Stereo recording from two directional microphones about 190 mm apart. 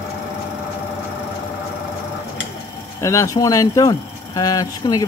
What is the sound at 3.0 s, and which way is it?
Speech, 15° left (ahead or behind).